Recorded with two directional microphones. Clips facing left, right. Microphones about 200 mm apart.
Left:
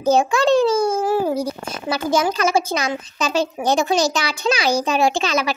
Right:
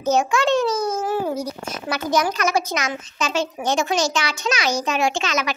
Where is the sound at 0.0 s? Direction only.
30° left (ahead or behind).